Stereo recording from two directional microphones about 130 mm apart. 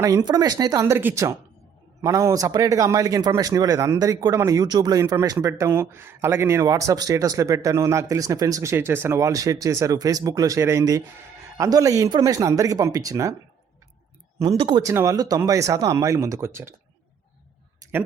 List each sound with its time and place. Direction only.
0.0 s speech: 30° right (ahead or behind)
14.4 s speech: 40° right (ahead or behind)
14.8 s speech: 25° right (ahead or behind)